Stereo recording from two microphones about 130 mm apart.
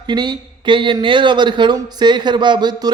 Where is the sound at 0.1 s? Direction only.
35° right (ahead or behind).